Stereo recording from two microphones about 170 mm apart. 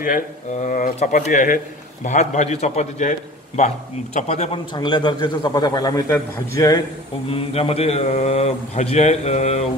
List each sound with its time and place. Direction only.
0.0 s a man's voice: 50° left (ahead or behind)
4.7 s a man's voice: 25° left (ahead or behind)
7.2 s a man's voice: 35° left (ahead or behind)